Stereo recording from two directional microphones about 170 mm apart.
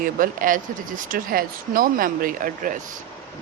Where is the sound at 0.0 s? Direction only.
55° right (ahead or behind).